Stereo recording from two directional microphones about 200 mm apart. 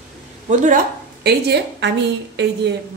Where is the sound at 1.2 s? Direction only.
55° right (ahead or behind).